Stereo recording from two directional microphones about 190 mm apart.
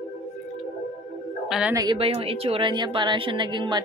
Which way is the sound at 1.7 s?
20° right (ahead or behind).